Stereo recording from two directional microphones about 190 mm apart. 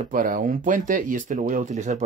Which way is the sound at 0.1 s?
45° right (ahead or behind).